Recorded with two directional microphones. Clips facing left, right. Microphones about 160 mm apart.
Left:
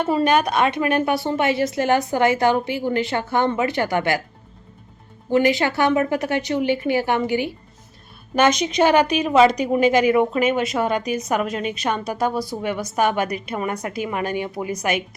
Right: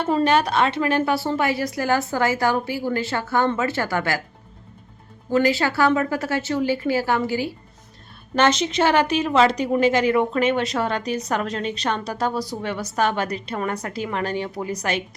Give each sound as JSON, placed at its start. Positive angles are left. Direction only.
{"t": 0.0, "sound": "a woman's voice", "side_deg": 10}
{"t": 5.3, "sound": "a woman's voice", "side_deg": 20}